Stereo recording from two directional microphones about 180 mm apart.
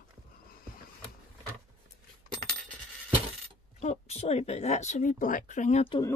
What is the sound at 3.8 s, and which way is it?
Speech, 35° left (ahead or behind).